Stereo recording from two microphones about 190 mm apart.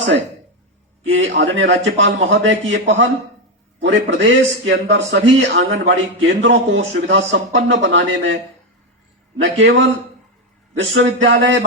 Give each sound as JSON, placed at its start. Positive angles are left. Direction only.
{"t": 1.0, "sound": "a man's voice", "side_deg": -85}
{"t": 9.4, "sound": "a man's voice", "side_deg": -85}
{"t": 10.9, "sound": "speech", "side_deg": -90}